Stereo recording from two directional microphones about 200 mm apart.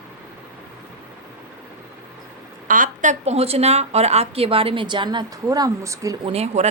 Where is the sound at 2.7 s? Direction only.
40° right (ahead or behind); by 6.3 s 15° right (ahead or behind).